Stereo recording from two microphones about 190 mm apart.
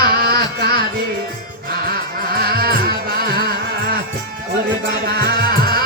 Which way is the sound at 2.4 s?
55° right (ahead or behind).